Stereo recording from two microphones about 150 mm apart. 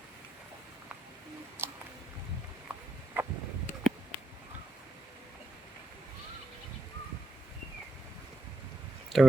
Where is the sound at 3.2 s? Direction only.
15° right (ahead or behind).